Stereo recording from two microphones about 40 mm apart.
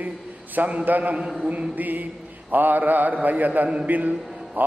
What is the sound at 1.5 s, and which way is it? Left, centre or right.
Mantra, right.